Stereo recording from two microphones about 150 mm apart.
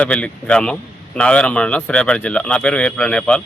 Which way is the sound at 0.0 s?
10° left (ahead or behind).